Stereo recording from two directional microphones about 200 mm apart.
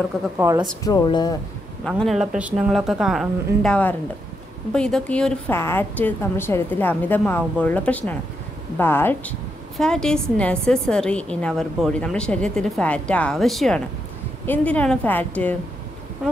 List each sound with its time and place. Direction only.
0.4 s speech: 15° right (ahead or behind)
0.8 s speech: 20° left (ahead or behind)
1.9 s a woman's voice: centre (ahead or behind)